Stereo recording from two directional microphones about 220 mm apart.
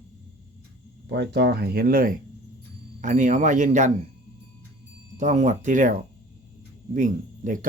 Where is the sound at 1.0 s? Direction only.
50° right (ahead or behind); by 3.9 s 35° right (ahead or behind).